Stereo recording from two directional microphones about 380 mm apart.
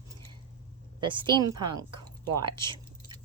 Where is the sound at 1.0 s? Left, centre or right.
Centre.